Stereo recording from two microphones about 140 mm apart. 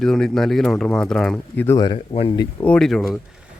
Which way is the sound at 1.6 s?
25° left (ahead or behind).